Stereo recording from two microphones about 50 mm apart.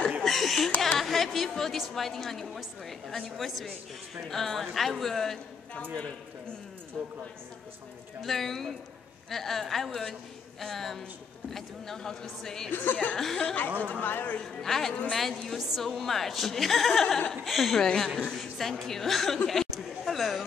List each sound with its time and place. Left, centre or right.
0.2 s laughter: centre
0.7 s chatter: centre
1.8 s a woman's voice: centre
7.0 s speech: centre
8.2 s a woman's voice: centre
13.7 s speech: right
13.9 s speech: left
14.4 s a woman's voice: centre